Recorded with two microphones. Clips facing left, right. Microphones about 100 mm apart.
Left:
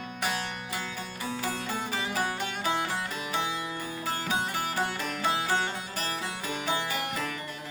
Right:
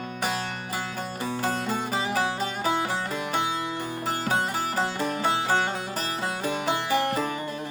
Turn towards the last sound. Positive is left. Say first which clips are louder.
# right 8 dB
turn(degrees=-40)  # may be behind; listen again after turning